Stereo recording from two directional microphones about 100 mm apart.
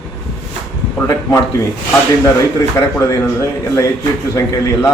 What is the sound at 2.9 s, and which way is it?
A man's voice, 30° left (ahead or behind).